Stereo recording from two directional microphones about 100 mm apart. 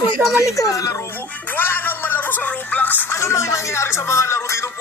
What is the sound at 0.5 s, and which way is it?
Speech, 35° left (ahead or behind).